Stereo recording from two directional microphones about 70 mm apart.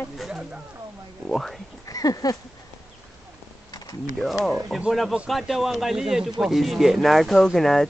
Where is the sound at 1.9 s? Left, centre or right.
Left.